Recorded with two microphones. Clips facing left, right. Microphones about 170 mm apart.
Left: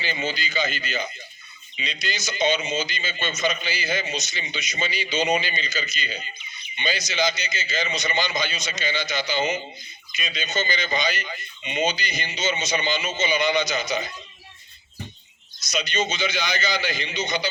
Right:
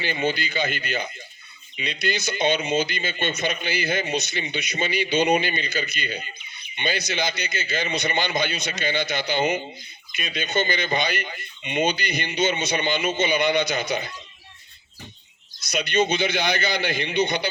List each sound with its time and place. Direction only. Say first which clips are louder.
0.0 s speech: right 4 dB; 55° right (ahead or behind)
15.6 s speech: right 4 dB; 55° right (ahead or behind)